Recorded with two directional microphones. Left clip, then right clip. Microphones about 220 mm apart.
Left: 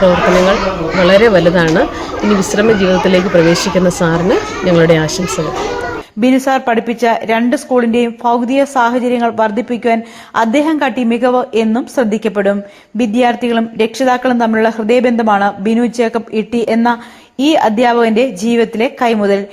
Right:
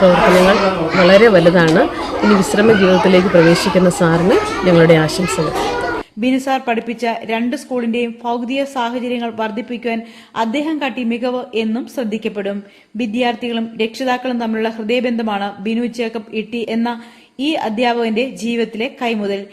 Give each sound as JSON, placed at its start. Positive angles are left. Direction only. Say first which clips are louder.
{"t": 1.0, "sound": "speech", "louder": "left 1 dB", "side_deg": 0}
{"t": 6.1, "sound": "a woman's voice", "louder": "left 7 dB", "side_deg": 15}